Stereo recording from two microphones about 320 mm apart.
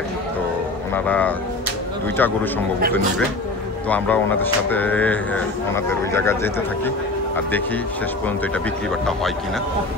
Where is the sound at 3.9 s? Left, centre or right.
Centre.